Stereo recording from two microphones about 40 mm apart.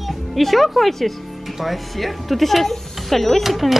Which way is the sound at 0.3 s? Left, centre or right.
Centre.